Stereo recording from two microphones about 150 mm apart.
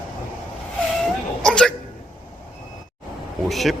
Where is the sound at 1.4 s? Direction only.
5° left (ahead or behind).